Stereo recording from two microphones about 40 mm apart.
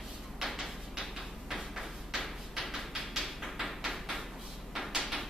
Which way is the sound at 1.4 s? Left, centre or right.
Centre.